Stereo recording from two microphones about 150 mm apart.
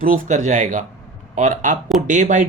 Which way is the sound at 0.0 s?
60° right (ahead or behind).